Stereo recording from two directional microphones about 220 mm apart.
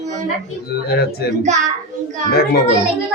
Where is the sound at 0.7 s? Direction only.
45° left (ahead or behind).